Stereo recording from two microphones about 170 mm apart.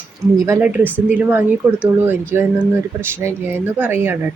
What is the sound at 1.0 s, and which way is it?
Speech, 10° right (ahead or behind).